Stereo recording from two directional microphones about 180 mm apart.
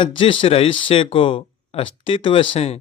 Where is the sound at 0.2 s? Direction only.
30° left (ahead or behind).